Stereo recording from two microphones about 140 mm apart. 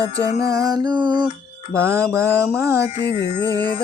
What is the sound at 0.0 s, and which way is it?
Music, 25° right (ahead or behind).